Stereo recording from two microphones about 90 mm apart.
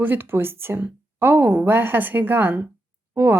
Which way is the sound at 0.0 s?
25° right (ahead or behind).